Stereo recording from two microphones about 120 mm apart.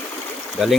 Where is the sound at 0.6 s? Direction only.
Centre (ahead or behind).